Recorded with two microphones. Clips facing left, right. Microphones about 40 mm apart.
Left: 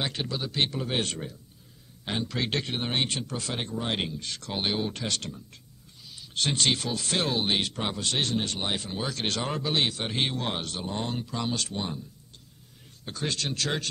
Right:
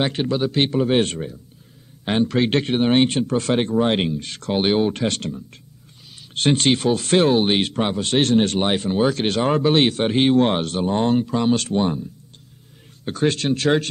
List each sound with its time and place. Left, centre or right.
0.0 s speech: right
8.2 s speech: right
13.0 s speech: right